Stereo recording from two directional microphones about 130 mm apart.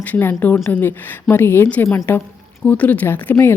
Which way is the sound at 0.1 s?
15° left (ahead or behind).